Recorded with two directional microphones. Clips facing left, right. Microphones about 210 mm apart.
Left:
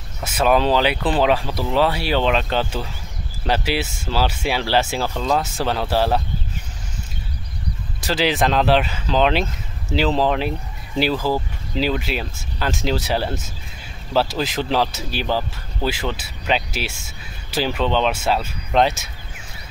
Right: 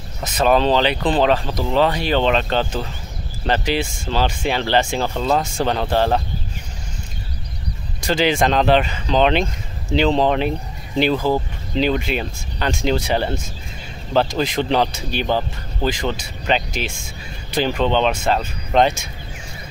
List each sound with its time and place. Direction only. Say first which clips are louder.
0.2 s speech: right 1 dB; 10° left (ahead or behind)
5.1 s speech: right 1 dB; 5° right (ahead or behind)
8.0 s speech: right 2 dB; 5° left (ahead or behind)
11.1 s speech: right 2 dB; 20° right (ahead or behind)
11.7 s speech: right 3 dB; 5° left (ahead or behind)